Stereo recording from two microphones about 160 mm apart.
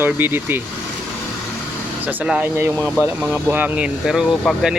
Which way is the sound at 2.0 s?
10° right (ahead or behind).